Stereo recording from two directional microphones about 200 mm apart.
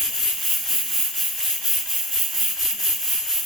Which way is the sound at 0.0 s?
Centre (ahead or behind).